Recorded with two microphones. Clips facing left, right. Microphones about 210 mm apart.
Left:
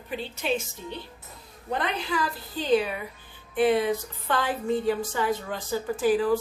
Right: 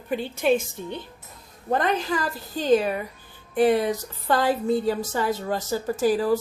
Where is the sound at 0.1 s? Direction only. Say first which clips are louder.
Right 7 dB; 50° right (ahead or behind).